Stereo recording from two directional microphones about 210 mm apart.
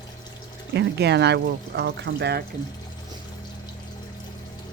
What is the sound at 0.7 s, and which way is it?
Speech, 55° right (ahead or behind).